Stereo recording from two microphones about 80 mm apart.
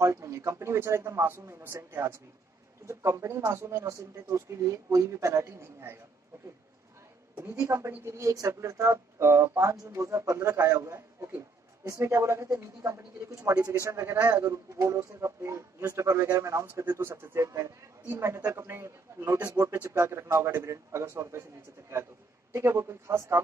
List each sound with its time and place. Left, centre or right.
0.0 s speech: right
7.3 s a woman's voice: right